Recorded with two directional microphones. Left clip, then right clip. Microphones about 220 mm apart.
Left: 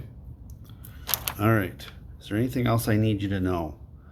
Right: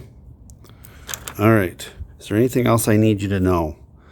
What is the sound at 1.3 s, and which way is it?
Speech, 50° right (ahead or behind).